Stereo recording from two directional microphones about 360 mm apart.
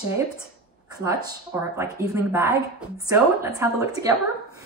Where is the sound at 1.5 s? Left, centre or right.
Centre.